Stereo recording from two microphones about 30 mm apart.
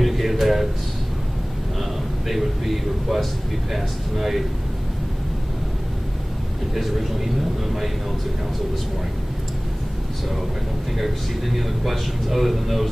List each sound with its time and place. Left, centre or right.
0.0 s a sound: centre
2.2 s speech: centre
6.7 s speech: centre
11.0 s speech: centre